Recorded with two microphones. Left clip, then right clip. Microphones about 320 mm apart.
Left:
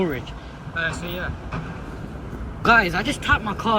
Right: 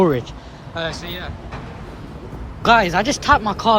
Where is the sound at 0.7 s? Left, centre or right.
Centre.